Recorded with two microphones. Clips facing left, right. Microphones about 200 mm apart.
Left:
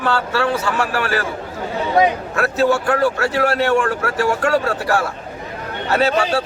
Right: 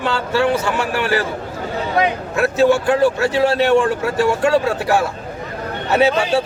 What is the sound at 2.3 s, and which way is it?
A man's voice, 25° right (ahead or behind).